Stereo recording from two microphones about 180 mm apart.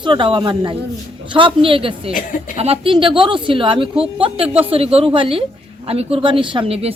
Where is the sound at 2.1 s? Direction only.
50° left (ahead or behind).